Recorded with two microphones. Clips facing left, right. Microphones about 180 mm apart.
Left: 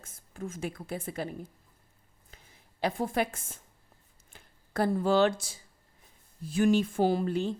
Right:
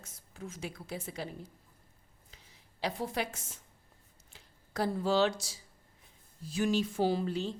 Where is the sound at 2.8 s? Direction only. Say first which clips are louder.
Left 5 dB; 50° left (ahead or behind).